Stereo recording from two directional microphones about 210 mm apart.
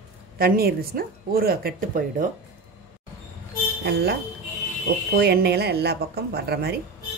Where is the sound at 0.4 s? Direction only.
45° right (ahead or behind).